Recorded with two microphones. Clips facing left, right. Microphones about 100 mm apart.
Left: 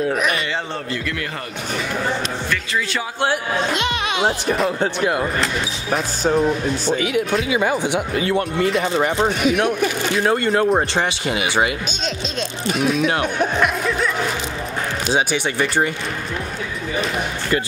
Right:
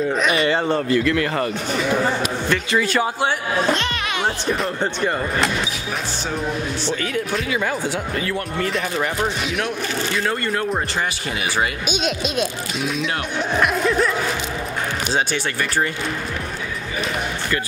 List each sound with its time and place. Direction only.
0.1 s speech: 5° left (ahead or behind)
3.7 s speech: 15° left (ahead or behind)
4.5 s speech: 5° left (ahead or behind)
7.4 s speech: 15° left (ahead or behind)
9.4 s speech: 50° left (ahead or behind)
9.8 s speech: 20° left (ahead or behind)
11.9 s speech: 10° right (ahead or behind)
13.6 s speech: centre (ahead or behind)
15.1 s speech: 10° left (ahead or behind)